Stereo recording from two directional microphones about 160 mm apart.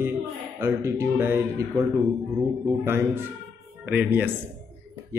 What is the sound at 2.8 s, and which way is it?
Speech, 15° right (ahead or behind).